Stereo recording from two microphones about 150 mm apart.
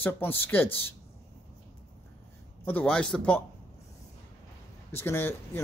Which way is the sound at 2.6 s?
10° left (ahead or behind).